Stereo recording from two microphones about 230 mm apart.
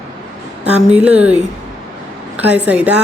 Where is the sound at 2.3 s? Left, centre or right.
Centre.